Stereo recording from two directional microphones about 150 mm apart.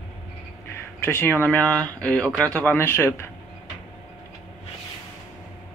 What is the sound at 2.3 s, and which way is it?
Speech, 20° right (ahead or behind).